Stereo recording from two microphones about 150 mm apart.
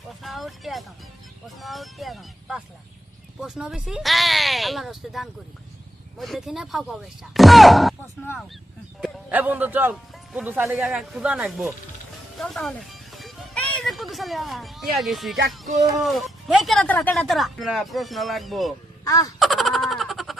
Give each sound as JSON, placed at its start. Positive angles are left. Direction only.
{"t": 0.2, "sound": "speech", "side_deg": 0}
{"t": 9.3, "sound": "a man's voice", "side_deg": -10}
{"t": 12.4, "sound": "music", "side_deg": 5}
{"t": 14.9, "sound": "speech", "side_deg": 0}
{"t": 19.0, "sound": "a sound", "side_deg": 20}
{"t": 19.4, "sound": "a sound", "side_deg": 0}